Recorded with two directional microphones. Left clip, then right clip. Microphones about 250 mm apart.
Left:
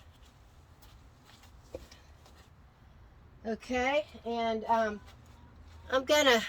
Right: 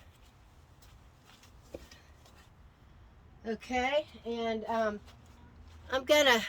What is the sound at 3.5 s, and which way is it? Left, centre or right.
A woman's voice, centre.